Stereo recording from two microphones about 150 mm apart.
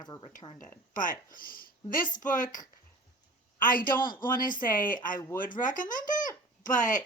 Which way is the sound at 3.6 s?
70° left (ahead or behind).